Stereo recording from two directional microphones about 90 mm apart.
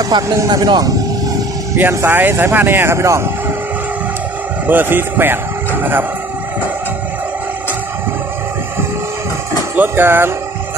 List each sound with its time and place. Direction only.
0.0 s speech: 40° right (ahead or behind)
1.8 s speech: 25° right (ahead or behind)
4.6 s speech: 20° right (ahead or behind)
9.8 s speech: 25° right (ahead or behind)